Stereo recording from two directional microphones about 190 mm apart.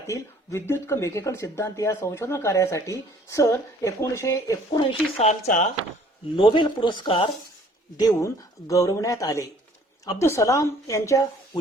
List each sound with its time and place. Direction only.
0.7 s speech: 15° left (ahead or behind)
5.1 s speech: 35° left (ahead or behind)
6.3 s speech: 25° left (ahead or behind)